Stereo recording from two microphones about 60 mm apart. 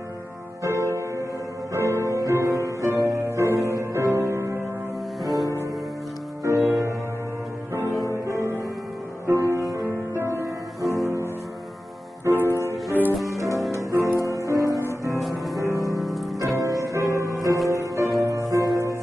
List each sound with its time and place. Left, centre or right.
0.7 s music: right
6.4 s music: right
7.9 s music: left
8.3 s music: right
9.6 s music: right
10.1 s music: right
10.9 s music: right
12.3 s music: right
13.0 s music: left
13.7 s music: right
14.8 s music: right
15.1 s music: centre
15.6 s music: right